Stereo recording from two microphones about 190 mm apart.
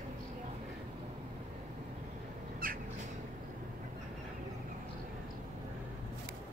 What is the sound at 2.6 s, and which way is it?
Crow, 50° right (ahead or behind).